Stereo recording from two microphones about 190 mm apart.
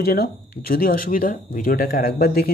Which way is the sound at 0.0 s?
50° left (ahead or behind).